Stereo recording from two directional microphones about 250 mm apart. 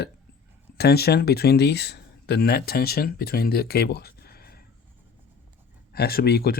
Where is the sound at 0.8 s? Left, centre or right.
Left.